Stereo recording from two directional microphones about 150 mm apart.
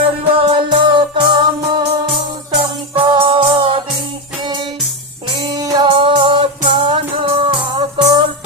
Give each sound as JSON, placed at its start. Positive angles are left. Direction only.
{"t": 0.0, "sound": "music", "side_deg": -40}
{"t": 3.0, "sound": "music", "side_deg": -35}
{"t": 5.5, "sound": "music", "side_deg": -30}